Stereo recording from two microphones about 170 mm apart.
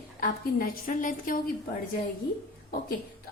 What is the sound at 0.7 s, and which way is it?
Speech, 50° left (ahead or behind).